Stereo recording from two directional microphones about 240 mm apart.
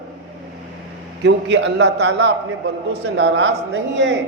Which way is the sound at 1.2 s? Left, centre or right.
Right.